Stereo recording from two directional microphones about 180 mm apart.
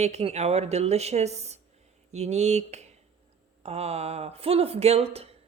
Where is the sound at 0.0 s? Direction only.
35° right (ahead or behind).